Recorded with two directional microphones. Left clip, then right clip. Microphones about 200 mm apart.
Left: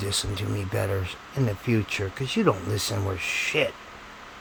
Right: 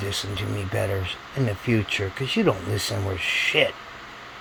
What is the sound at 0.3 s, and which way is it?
Speech, 15° left (ahead or behind).